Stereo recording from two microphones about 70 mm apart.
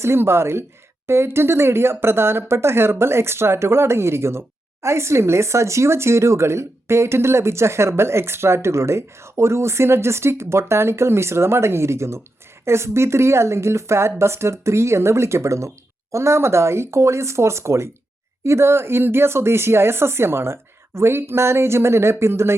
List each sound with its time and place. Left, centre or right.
0.0 s speech: right